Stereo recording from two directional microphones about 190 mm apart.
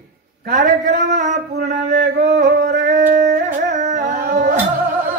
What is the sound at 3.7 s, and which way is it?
Dog, 40° right (ahead or behind).